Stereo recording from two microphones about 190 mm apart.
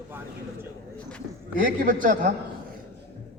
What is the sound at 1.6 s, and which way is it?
Speech, 45° right (ahead or behind).